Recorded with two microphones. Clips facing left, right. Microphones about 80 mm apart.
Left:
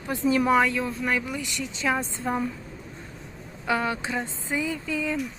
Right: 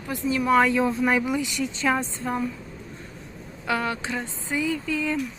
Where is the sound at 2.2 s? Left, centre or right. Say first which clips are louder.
Even; centre.